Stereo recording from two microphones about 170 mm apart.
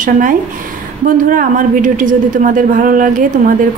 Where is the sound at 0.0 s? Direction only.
50° right (ahead or behind).